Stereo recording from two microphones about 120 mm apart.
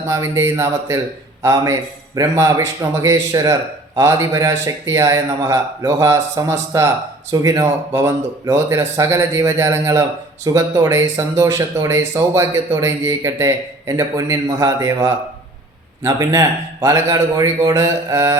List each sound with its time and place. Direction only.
0.1 s a man's voice: 25° right (ahead or behind)